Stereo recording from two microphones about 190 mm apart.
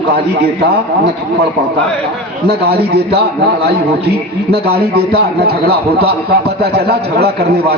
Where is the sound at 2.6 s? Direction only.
55° right (ahead or behind).